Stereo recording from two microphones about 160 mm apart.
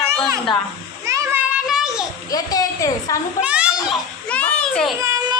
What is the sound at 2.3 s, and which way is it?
Speech, 25° left (ahead or behind).